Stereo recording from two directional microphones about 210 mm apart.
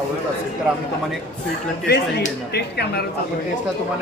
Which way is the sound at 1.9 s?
50° left (ahead or behind).